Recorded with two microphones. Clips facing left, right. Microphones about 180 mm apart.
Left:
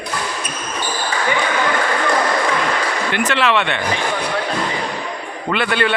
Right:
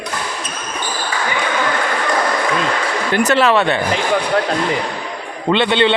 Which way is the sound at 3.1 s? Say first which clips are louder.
Right 5 dB; 40° right (ahead or behind).